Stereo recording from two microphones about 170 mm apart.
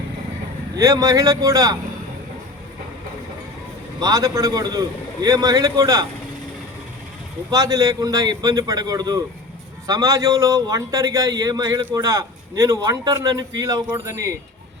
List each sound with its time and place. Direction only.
0.8 s a man's voice: 20° right (ahead or behind)
4.0 s a man's voice: 20° right (ahead or behind)
7.5 s a man's voice: 20° right (ahead or behind)